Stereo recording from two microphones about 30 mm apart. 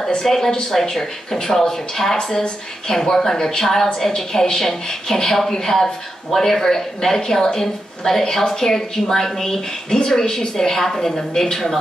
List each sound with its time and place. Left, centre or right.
0.2 s a woman's voice: centre